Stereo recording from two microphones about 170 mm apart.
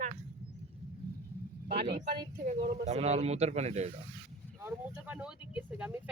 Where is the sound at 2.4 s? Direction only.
40° right (ahead or behind).